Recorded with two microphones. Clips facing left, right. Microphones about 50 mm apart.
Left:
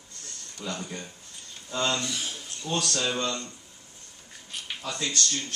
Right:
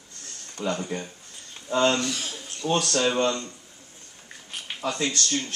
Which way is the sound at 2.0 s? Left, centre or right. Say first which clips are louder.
Right 3 dB; right.